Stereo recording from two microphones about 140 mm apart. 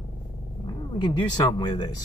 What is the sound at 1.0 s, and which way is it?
Speech, 30° left (ahead or behind).